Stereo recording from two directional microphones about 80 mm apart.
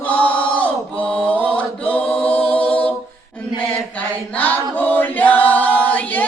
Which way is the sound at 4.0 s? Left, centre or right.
Left.